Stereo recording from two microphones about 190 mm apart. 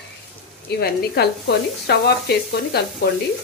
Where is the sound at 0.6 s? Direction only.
60° left (ahead or behind).